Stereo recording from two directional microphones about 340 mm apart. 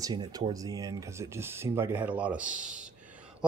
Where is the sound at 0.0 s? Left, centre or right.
Centre.